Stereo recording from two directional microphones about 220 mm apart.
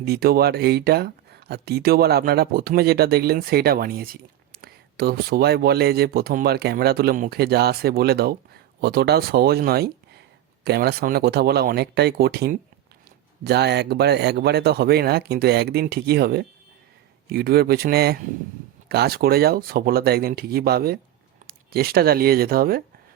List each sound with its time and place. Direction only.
0.0 s speech: 45° right (ahead or behind)